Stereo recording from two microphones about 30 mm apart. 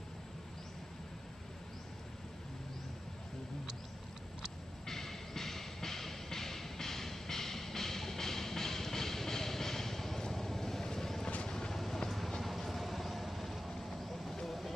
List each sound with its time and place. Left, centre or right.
4.8 s music: centre
10.3 s vehicle: centre
11.7 s vehicle: centre